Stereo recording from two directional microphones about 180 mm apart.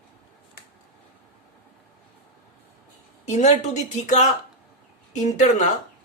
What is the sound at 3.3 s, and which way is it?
Speech, 40° left (ahead or behind).